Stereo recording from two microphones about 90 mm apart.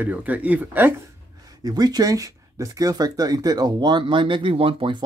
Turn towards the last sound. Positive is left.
turn(degrees=-70)  # may be behind; listen again after turning